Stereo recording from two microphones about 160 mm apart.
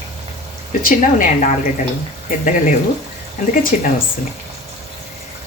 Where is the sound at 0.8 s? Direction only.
55° left (ahead or behind).